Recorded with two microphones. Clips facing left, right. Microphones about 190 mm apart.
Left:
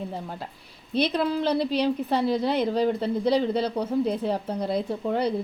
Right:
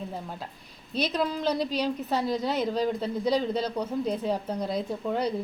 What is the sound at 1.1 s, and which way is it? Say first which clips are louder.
Speech: left 3 dB; 10° left (ahead or behind).